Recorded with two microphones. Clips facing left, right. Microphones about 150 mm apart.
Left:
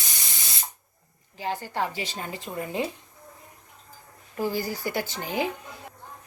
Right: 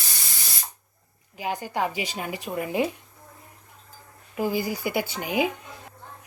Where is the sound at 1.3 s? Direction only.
15° right (ahead or behind).